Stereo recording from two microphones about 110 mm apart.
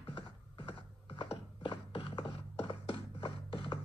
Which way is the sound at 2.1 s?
50° left (ahead or behind).